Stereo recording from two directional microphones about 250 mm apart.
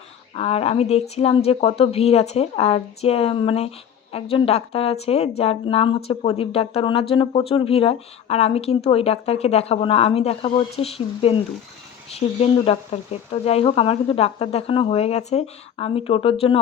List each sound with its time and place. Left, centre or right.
0.3 s speech: left